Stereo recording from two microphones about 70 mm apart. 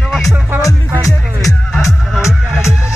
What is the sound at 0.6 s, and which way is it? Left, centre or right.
Music, left.